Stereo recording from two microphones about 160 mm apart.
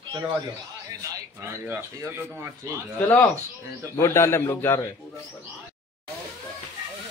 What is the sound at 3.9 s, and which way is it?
Speech, 15° left (ahead or behind).